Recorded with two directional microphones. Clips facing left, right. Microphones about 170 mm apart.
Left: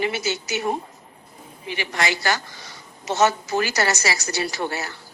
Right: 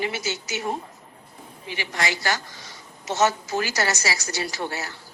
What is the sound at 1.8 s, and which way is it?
A woman's voice, 65° left (ahead or behind).